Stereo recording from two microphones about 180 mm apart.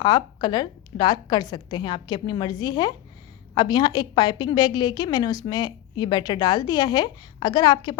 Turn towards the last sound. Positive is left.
turn(degrees=25)  # may be behind; listen again after turning